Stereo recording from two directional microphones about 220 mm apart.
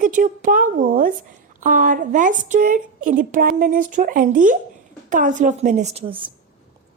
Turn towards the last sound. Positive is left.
turn(degrees=-25)  # may be behind; listen again after turning